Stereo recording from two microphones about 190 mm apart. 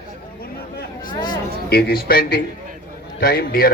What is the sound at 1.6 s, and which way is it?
A man's voice, 55° left (ahead or behind).